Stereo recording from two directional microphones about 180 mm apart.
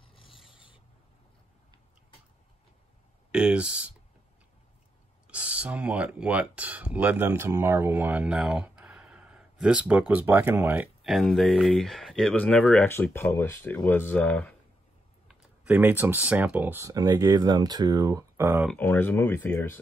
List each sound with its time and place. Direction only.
0.0 s filing: 30° left (ahead or behind)
0.5 s rub: 30° left (ahead or behind)
3.3 s speech: 5° right (ahead or behind)
5.3 s speech: 5° right (ahead or behind)
15.2 s speech: 10° right (ahead or behind)
18.7 s speech: 10° left (ahead or behind)